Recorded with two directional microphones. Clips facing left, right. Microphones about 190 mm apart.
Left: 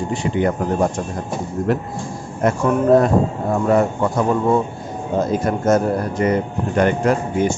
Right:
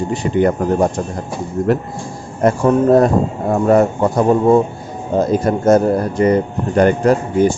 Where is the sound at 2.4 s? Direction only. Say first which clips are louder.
Right 4 dB; 35° right (ahead or behind).